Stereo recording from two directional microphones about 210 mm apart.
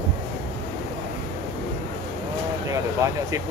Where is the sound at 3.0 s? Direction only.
15° right (ahead or behind).